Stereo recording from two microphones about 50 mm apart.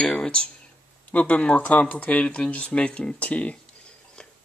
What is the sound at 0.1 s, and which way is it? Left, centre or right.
Speech, centre.